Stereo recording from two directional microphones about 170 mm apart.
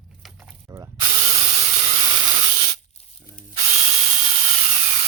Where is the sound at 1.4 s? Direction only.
40° right (ahead or behind).